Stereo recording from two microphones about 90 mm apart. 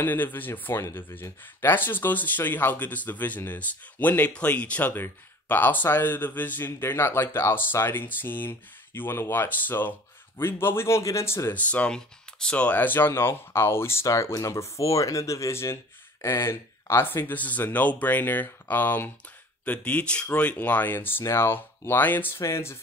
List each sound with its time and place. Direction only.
0.0 s speech: 20° left (ahead or behind)
11.5 s speech: 15° left (ahead or behind)